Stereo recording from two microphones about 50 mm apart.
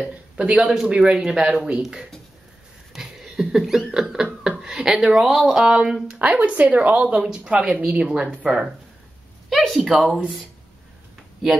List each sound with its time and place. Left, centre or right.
0.4 s a man's voice: right
2.9 s a sound: centre
5.3 s speech: centre
5.6 s speech: centre
6.2 s a woman's voice: right
8.0 s a man's voice: centre
8.5 s speech: centre
9.5 s a sound: centre
9.8 s speech: centre